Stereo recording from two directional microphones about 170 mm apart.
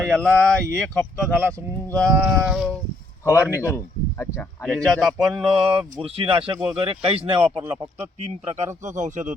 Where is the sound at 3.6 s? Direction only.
15° left (ahead or behind).